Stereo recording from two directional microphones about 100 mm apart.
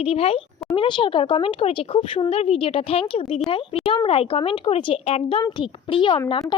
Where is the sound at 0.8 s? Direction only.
55° left (ahead or behind).